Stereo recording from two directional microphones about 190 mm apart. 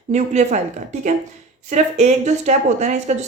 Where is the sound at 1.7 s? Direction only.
35° right (ahead or behind).